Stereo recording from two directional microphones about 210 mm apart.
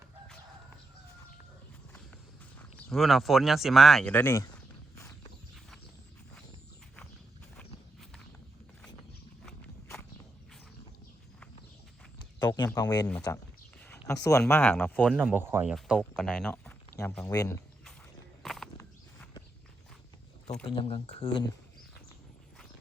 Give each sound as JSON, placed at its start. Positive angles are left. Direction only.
{"t": 2.6, "sound": "speech", "side_deg": 0}
{"t": 9.5, "sound": "walk", "side_deg": 10}
{"t": 12.4, "sound": "a sound", "side_deg": 20}
{"t": 13.3, "sound": "speech", "side_deg": 15}
{"t": 15.1, "sound": "speech", "side_deg": -10}
{"t": 17.2, "sound": "speech", "side_deg": 15}
{"t": 18.4, "sound": "walk", "side_deg": 0}
{"t": 20.7, "sound": "speech", "side_deg": 25}